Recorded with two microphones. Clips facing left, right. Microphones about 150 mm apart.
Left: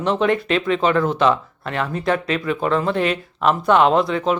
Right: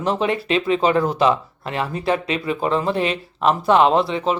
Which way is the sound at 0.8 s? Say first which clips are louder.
Left 1 dB; 35° right (ahead or behind).